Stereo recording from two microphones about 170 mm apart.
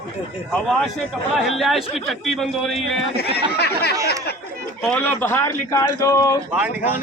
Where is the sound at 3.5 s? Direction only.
70° left (ahead or behind).